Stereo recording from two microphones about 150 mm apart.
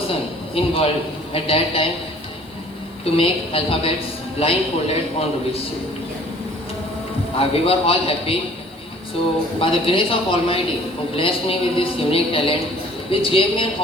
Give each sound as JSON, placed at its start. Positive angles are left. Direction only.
{"t": 0.1, "sound": "a man's voice", "side_deg": 40}
{"t": 3.0, "sound": "speech", "side_deg": 40}
{"t": 7.3, "sound": "speech", "side_deg": 40}
{"t": 9.6, "sound": "speech", "side_deg": 40}